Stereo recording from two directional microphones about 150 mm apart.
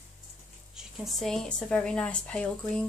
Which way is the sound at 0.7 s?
Centre (ahead or behind).